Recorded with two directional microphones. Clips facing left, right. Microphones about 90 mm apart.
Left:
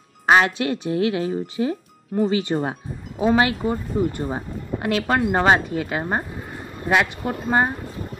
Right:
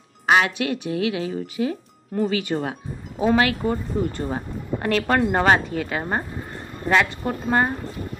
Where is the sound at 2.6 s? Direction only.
30° left (ahead or behind).